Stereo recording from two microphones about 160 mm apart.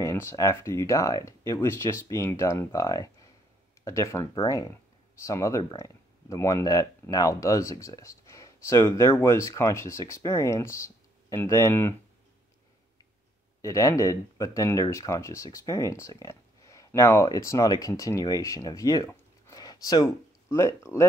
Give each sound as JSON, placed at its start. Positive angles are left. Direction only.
{"t": 0.0, "sound": "speech", "side_deg": 15}
{"t": 13.6, "sound": "speech", "side_deg": 20}